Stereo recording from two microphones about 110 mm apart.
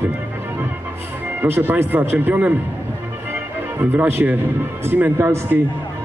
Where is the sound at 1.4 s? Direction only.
20° right (ahead or behind).